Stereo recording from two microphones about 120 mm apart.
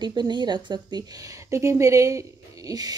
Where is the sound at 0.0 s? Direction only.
40° right (ahead or behind).